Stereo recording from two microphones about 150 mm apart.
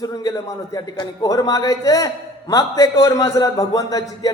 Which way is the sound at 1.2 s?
25° left (ahead or behind).